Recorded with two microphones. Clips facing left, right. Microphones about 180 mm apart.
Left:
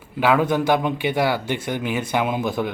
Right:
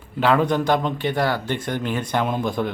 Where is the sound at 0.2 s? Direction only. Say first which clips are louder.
Even; 5° left (ahead or behind).